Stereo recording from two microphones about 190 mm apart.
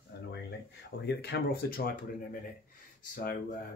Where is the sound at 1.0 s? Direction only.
60° left (ahead or behind).